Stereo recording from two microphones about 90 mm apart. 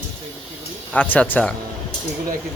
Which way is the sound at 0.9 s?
15° left (ahead or behind).